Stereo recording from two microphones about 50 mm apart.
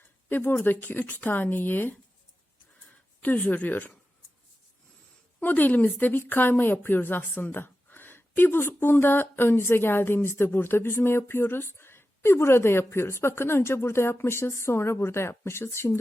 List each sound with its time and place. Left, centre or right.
0.3 s speech: left
3.2 s speech: left
5.4 s a woman's voice: left